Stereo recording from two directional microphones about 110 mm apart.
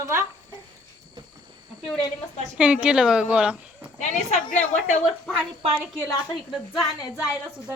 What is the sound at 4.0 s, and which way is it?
Speech, 90° left.